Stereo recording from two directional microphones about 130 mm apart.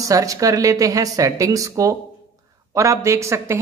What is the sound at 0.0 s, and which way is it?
Speech, 25° right (ahead or behind).